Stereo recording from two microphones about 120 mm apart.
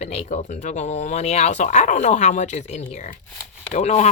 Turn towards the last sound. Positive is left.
turn(degrees=70)  # may be behind; listen again after turning